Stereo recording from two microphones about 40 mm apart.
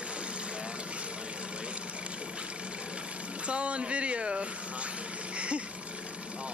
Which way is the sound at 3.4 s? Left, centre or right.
Right.